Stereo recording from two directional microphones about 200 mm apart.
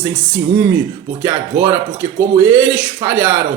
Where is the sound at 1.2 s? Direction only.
10° right (ahead or behind).